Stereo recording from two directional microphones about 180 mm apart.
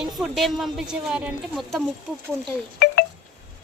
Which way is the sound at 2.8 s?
60° left (ahead or behind).